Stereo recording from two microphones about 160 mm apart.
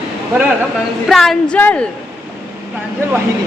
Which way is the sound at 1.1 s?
Centre (ahead or behind).